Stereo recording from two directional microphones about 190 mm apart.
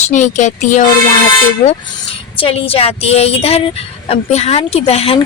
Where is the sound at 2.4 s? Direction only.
30° left (ahead or behind).